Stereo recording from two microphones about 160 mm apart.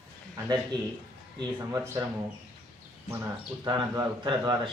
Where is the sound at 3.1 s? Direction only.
20° right (ahead or behind).